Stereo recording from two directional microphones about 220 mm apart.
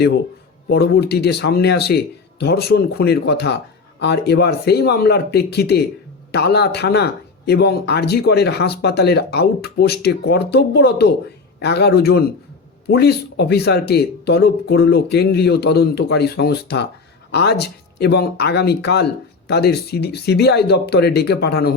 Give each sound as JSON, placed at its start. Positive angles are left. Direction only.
{"t": 0.7, "sound": "speech", "side_deg": 45}